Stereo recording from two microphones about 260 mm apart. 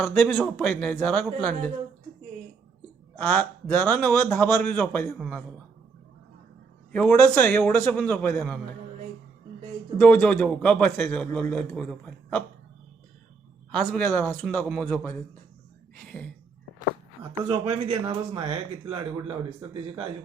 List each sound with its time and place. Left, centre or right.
0.0 s a man's voice: centre
3.2 s a man's voice: centre
6.9 s a man's voice: centre
10.0 s a man's voice: centre
13.7 s a man's voice: centre
17.3 s a man's voice: centre